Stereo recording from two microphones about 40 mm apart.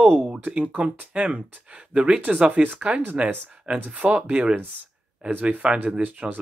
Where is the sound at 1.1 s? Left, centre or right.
Right.